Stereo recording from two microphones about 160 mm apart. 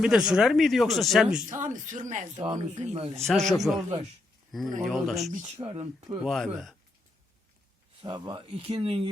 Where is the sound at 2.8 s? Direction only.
40° right (ahead or behind).